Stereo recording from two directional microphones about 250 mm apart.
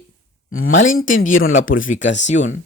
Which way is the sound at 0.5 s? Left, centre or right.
Left.